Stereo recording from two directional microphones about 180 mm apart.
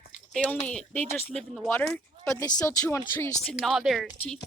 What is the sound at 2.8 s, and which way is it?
Speech, 10° left (ahead or behind).